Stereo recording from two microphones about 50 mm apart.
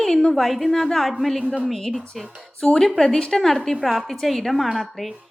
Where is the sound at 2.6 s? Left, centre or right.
Centre.